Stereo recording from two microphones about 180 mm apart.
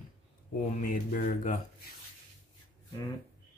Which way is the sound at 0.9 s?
50° left (ahead or behind).